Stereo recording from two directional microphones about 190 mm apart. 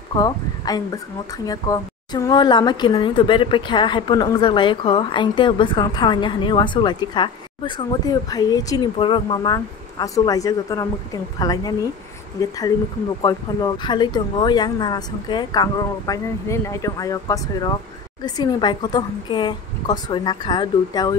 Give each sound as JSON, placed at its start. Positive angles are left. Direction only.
{"t": 0.1, "sound": "speech", "side_deg": 20}